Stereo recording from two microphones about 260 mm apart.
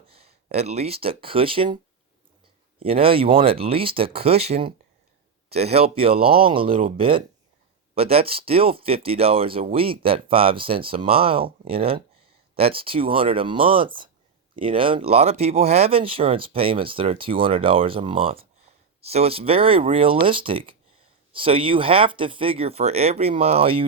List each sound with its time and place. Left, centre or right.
0.1 s speech: right
2.8 s speech: right